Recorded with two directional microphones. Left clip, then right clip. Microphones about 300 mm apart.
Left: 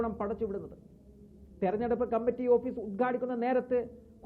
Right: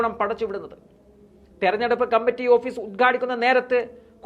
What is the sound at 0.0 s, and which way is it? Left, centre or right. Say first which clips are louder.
A woman's voice: right 10 dB; centre.